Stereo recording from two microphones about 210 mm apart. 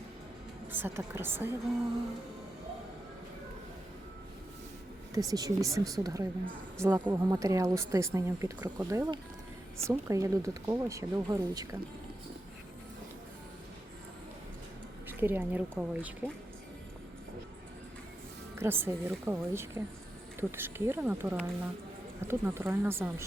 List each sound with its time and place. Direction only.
0.7 s speech: 10° right (ahead or behind)
5.3 s speech: 15° right (ahead or behind)
15.0 s speech: 10° right (ahead or behind)
18.5 s speech: 10° right (ahead or behind)